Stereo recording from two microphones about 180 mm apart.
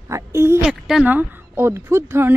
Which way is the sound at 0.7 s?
5° right (ahead or behind).